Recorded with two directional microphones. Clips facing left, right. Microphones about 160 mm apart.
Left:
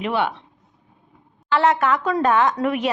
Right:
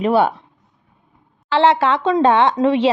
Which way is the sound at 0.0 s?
40° right (ahead or behind).